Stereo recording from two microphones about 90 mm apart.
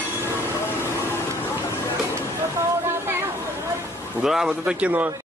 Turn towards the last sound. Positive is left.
turn(degrees=-15)  # may be behind; listen again after turning